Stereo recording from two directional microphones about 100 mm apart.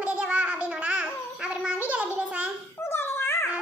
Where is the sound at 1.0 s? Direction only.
5° right (ahead or behind).